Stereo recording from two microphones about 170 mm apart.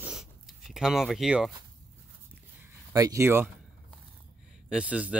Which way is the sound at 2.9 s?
20° right (ahead or behind).